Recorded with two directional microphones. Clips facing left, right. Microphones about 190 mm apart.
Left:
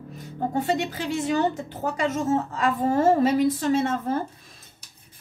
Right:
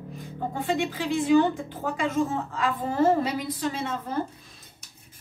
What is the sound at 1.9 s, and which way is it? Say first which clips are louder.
A woman's voice: left 2 dB; 45° left (ahead or behind).